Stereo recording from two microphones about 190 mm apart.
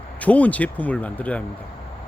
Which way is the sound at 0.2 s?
10° left (ahead or behind).